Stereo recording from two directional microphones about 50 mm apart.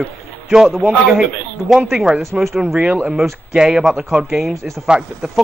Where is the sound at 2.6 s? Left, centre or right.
Right.